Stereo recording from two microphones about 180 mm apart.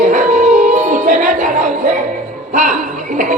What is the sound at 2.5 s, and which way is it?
Speech, 45° right (ahead or behind).